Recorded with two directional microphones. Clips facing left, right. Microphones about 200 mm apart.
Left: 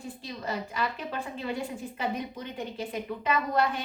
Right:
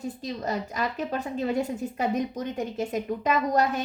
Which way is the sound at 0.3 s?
40° right (ahead or behind).